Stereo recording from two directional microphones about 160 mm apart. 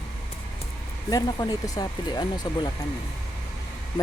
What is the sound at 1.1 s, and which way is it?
Speech, 20° left (ahead or behind).